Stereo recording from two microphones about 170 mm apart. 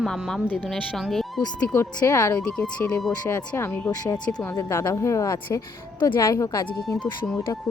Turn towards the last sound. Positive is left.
turn(degrees=10)  # may be behind; listen again after turning